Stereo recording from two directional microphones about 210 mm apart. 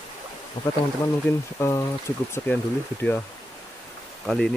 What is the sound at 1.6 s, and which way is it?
Speech, 15° left (ahead or behind).